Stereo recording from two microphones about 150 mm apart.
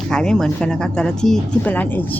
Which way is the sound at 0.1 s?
5° left (ahead or behind).